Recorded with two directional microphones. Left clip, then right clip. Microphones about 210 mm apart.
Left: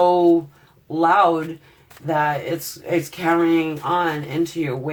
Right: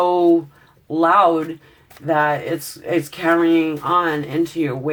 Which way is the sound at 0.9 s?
35° right (ahead or behind).